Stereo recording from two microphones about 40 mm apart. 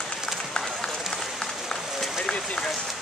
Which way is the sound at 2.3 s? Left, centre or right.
Left.